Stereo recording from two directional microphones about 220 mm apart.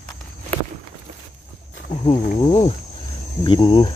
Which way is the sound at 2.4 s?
30° left (ahead or behind).